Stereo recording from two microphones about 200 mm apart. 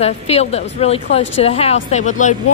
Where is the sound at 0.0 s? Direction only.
30° left (ahead or behind).